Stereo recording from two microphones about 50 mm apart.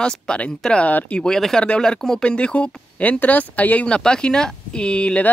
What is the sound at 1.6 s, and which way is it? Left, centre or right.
Speech, left.